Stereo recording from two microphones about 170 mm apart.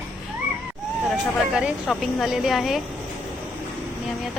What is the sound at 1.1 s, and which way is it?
A woman's voice, 5° right (ahead or behind).